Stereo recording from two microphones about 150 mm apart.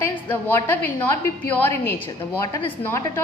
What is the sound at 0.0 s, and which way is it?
A woman's voice, 15° left (ahead or behind).